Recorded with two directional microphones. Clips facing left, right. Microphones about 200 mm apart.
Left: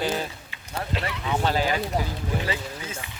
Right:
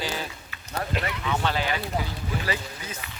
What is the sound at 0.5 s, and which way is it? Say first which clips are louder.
Speech: right 2 dB; 30° left (ahead or behind).